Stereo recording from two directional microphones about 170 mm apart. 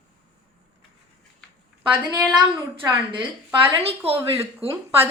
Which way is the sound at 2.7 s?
30° right (ahead or behind).